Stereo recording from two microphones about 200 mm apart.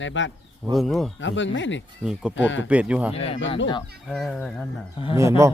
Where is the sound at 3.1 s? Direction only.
30° left (ahead or behind).